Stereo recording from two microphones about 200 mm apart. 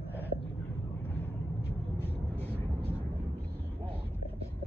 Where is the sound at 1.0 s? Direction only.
10° left (ahead or behind).